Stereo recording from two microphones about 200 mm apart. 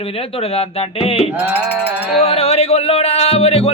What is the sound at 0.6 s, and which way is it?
Speech, 30° left (ahead or behind).